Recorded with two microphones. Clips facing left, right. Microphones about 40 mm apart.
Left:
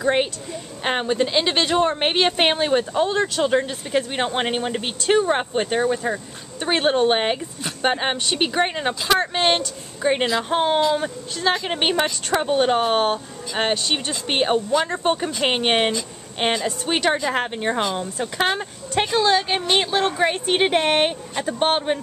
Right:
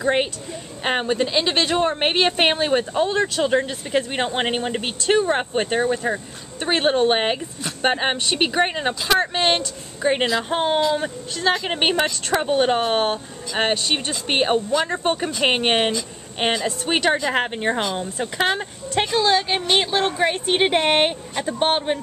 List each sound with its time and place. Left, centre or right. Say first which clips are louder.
0.0 s a woman's voice: even; centre
5.5 s speech: even; centre
6.7 s a woman's voice: even; centre
11.7 s a woman's voice: right 1 dB; centre
17.3 s speech: right 1 dB; centre
17.6 s a woman's voice: even; centre
21.4 s a woman's voice: even; centre